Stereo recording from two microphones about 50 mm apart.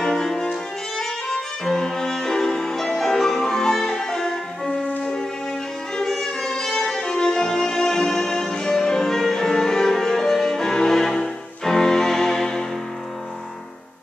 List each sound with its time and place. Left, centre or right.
0.0 s music: centre